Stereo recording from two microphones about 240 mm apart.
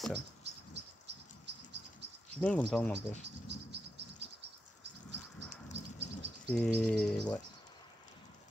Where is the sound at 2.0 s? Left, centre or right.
Right.